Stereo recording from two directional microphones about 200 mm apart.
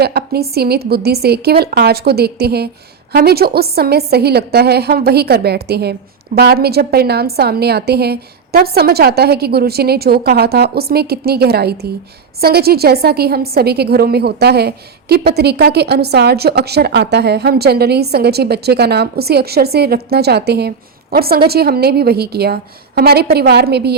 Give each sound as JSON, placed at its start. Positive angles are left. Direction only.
{"t": 0.0, "sound": "a woman's voice", "side_deg": -50}